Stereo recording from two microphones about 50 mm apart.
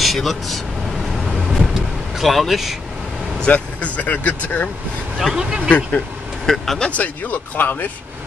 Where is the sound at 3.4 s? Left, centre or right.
Left.